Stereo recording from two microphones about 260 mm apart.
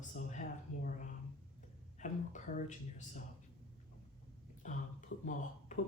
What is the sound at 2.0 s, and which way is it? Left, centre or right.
Speech, left.